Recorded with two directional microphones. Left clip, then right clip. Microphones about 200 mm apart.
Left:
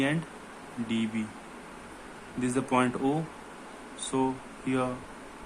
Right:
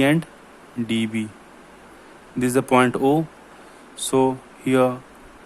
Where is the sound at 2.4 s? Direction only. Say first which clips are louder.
Right 10 dB; 55° right (ahead or behind).